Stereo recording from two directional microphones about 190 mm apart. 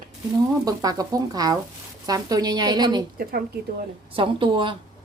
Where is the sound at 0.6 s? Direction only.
20° right (ahead or behind).